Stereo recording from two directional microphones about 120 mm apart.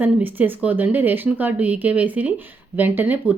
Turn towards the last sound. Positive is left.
turn(degrees=-15)  # may be behind; listen again after turning